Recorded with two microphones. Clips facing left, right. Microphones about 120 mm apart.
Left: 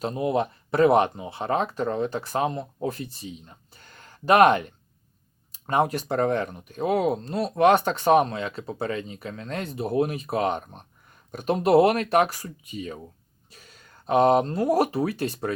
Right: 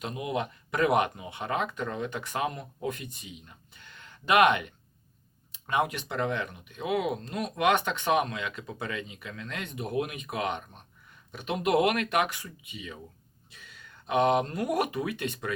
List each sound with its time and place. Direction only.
0.0 s speech: 35° left (ahead or behind)